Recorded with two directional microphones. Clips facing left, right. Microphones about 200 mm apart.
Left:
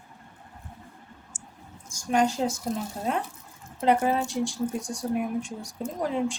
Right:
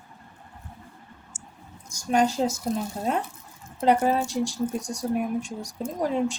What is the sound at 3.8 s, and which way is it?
Speech, 40° right (ahead or behind).